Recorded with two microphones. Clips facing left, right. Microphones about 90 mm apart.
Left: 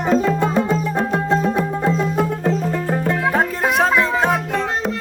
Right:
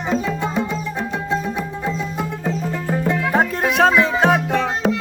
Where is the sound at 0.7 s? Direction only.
40° left (ahead or behind).